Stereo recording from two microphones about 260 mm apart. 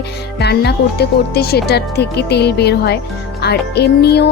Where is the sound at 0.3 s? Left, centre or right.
Left.